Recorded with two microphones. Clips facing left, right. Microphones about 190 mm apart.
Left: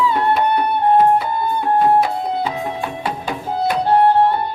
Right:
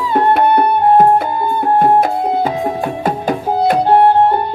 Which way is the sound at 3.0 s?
45° right (ahead or behind).